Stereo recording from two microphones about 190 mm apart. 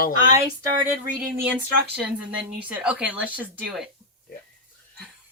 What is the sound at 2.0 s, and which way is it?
Speech, 5° right (ahead or behind).